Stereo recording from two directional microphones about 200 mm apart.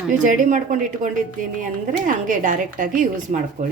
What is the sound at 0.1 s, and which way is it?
Speech, 40° right (ahead or behind).